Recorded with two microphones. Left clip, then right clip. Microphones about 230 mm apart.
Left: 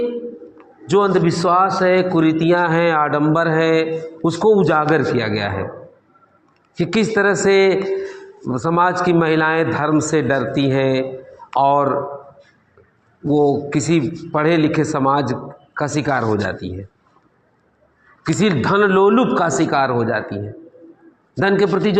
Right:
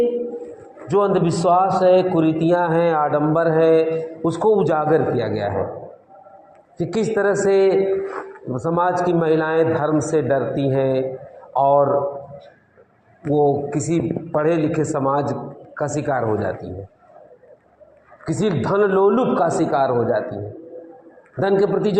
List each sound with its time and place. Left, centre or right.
0.9 s a man's voice: left
6.7 s a man's voice: left
13.3 s a man's voice: left
18.3 s a man's voice: left